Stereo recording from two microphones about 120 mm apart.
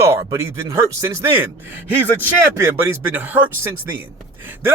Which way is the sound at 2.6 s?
20° right (ahead or behind).